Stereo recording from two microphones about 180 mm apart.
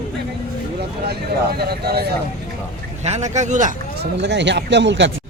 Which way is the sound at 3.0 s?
40° right (ahead or behind).